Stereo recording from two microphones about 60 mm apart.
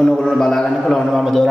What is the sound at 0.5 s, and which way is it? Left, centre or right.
Speech, centre.